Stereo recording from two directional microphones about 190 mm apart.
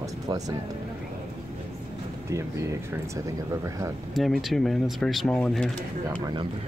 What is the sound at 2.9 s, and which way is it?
Speech, 15° right (ahead or behind).